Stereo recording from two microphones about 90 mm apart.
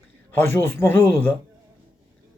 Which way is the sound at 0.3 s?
25° left (ahead or behind).